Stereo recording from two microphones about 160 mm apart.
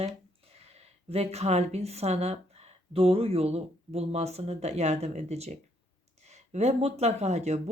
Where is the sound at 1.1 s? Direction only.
40° right (ahead or behind).